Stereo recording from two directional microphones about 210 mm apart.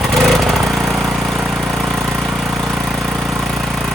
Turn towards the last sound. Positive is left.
turn(degrees=0)  # may be behind; listen again after turning